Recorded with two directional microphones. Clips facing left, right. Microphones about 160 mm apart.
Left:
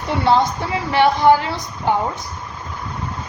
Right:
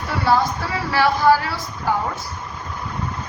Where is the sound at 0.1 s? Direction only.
20° left (ahead or behind).